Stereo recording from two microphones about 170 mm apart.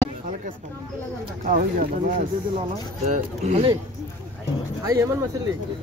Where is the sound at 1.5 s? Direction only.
50° right (ahead or behind).